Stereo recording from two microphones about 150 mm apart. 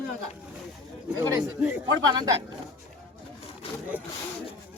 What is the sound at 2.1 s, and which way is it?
Speech, 25° right (ahead or behind).